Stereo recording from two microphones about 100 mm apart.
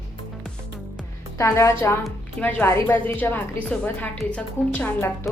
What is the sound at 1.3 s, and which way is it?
A woman's voice, 30° left (ahead or behind).